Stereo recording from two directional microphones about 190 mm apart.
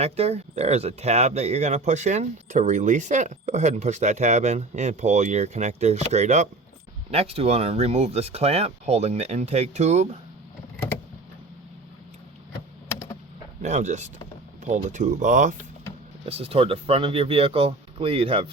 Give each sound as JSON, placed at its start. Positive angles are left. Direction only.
{"t": 0.0, "sound": "speech", "side_deg": -35}
{"t": 13.6, "sound": "speech", "side_deg": -40}
{"t": 16.3, "sound": "speech", "side_deg": -30}